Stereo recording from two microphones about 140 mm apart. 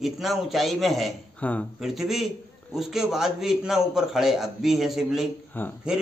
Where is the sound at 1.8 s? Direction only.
Centre (ahead or behind).